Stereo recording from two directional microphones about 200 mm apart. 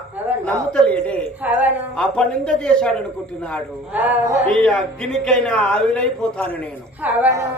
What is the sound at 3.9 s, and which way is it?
Speech, 10° right (ahead or behind).